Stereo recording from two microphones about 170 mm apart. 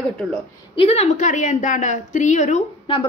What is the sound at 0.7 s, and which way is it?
A woman's voice, 35° left (ahead or behind).